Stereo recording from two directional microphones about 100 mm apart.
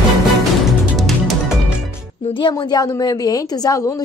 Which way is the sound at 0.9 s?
Centre (ahead or behind).